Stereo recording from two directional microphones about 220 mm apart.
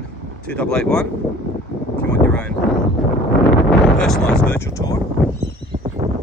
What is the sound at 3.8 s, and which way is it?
Speech, 5° left (ahead or behind).